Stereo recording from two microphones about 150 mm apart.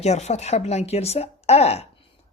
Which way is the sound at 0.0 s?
45° left (ahead or behind).